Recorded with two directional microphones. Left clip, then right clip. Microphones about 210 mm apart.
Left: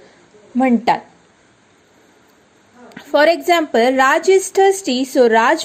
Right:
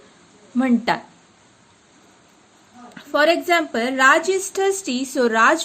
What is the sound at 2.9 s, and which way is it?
A woman's voice, 25° left (ahead or behind).